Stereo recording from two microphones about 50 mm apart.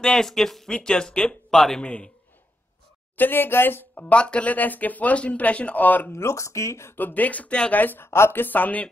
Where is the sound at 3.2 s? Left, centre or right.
Left.